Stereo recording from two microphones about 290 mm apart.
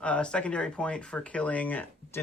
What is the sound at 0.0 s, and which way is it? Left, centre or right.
Speech, centre.